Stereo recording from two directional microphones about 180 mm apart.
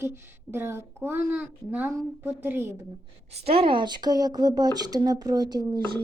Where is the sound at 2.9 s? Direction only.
35° right (ahead or behind).